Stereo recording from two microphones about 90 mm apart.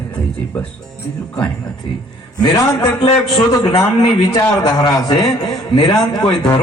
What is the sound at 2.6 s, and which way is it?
Speech, 35° left (ahead or behind).